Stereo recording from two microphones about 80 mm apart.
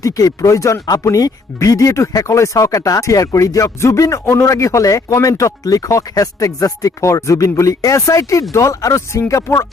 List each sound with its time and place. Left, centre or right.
0.0 s speech: left